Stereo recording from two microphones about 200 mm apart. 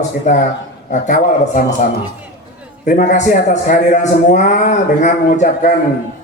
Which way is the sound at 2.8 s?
40° left (ahead or behind).